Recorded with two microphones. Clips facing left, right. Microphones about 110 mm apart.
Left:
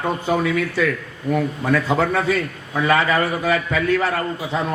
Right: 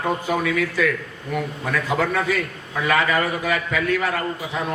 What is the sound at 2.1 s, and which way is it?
A man's voice, 30° left (ahead or behind).